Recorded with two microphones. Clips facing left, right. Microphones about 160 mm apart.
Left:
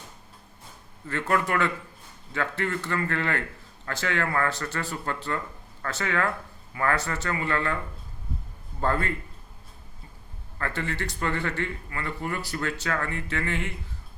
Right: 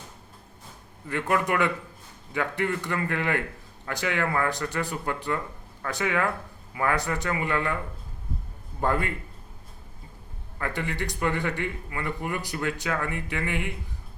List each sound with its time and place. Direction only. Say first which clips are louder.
1.0 s speech: even; 15° right (ahead or behind)
8.8 s speech: even; 15° right (ahead or behind)
10.6 s speech: even; 15° right (ahead or behind)